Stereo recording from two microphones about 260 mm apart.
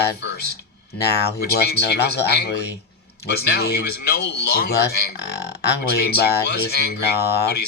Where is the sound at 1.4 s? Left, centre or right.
Left.